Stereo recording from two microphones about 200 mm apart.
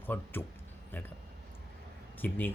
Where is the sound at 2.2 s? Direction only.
10° left (ahead or behind).